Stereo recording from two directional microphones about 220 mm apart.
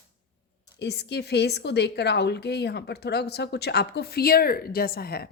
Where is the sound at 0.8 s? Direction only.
50° left (ahead or behind).